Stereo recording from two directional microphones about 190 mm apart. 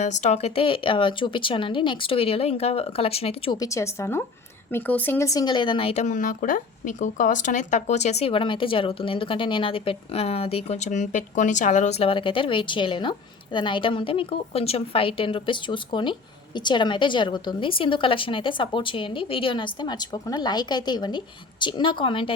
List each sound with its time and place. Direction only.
0.0 s speech: 35° left (ahead or behind)
3.6 s a woman's voice: 15° left (ahead or behind)